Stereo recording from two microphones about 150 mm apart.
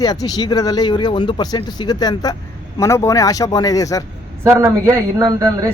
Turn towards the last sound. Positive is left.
turn(degrees=-25)  # may be behind; listen again after turning